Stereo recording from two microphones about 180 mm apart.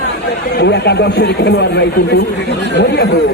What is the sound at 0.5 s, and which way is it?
Speech, 65° left (ahead or behind).